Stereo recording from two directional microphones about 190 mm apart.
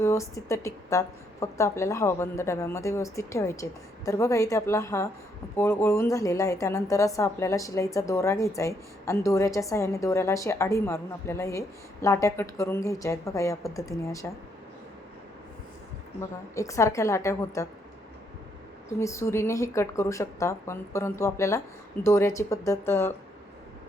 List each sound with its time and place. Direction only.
0.0 s a woman's voice: 15° left (ahead or behind)
16.6 s a woman's voice: 15° left (ahead or behind)
18.9 s a woman's voice: 15° left (ahead or behind)